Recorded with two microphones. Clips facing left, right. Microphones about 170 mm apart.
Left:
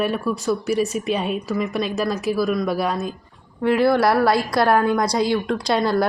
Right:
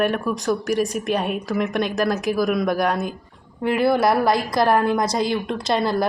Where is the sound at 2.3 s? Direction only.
15° right (ahead or behind).